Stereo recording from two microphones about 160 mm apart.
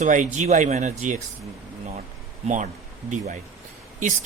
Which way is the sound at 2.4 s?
50° right (ahead or behind).